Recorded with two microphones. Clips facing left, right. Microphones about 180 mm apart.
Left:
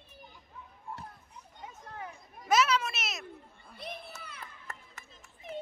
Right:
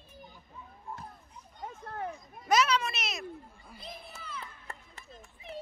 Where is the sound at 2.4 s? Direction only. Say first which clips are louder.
Even; 5° left (ahead or behind).